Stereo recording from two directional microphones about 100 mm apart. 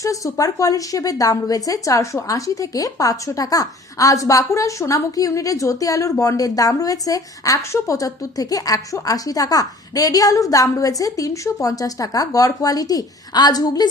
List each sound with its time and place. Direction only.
0.0 s a woman's voice: 35° left (ahead or behind)